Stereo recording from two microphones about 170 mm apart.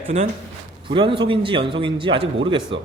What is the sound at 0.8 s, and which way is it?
A man's voice, 30° right (ahead or behind).